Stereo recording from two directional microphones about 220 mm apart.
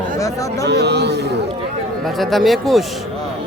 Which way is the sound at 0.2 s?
15° left (ahead or behind).